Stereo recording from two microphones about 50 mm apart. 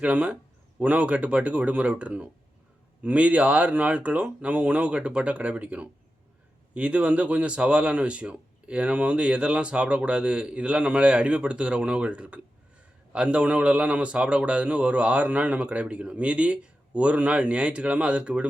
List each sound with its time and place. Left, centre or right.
0.0 s speech: right